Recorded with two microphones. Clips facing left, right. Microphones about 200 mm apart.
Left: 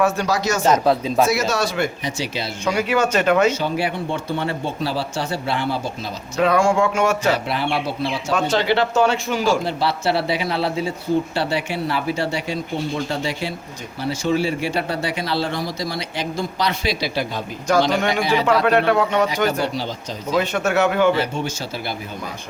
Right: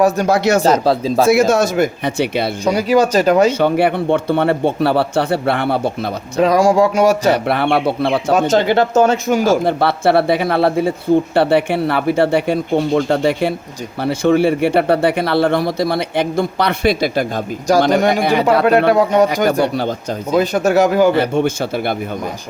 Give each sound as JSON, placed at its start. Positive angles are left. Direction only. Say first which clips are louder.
{"t": 0.3, "sound": "speech", "louder": "right 8 dB", "side_deg": -60}
{"t": 0.6, "sound": "speech", "louder": "right 3 dB", "side_deg": -35}
{"t": 1.3, "sound": "speech", "louder": "right 8 dB", "side_deg": -50}
{"t": 2.6, "sound": "speech", "louder": "right 5 dB", "side_deg": -35}
{"t": 3.5, "sound": "speech", "louder": "right 8 dB", "side_deg": -60}
{"t": 6.4, "sound": "speech", "louder": "right 5 dB", "side_deg": -35}
{"t": 7.3, "sound": "speech", "louder": "right 7 dB", "side_deg": -60}
{"t": 8.4, "sound": "speech", "louder": "right 3 dB", "side_deg": -45}
{"t": 18.9, "sound": "speech", "louder": "right 6 dB", "side_deg": -35}
{"t": 19.6, "sound": "speech", "louder": "right 7 dB", "side_deg": -55}
{"t": 20.4, "sound": "speech", "louder": "right 6 dB", "side_deg": -35}
{"t": 21.2, "sound": "speech", "louder": "right 8 dB", "side_deg": -55}